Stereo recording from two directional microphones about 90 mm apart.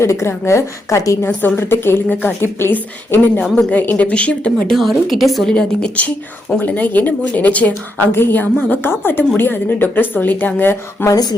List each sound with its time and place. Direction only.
0.0 s a woman's voice: 30° left (ahead or behind)
1.3 s a woman's voice: 20° left (ahead or behind)
4.8 s a woman's voice: centre (ahead or behind); by 11.1 s 25° left (ahead or behind)
11.1 s speech: 50° left (ahead or behind)